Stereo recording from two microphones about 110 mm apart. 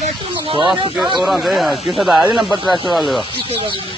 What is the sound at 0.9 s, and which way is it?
Speech, centre (ahead or behind).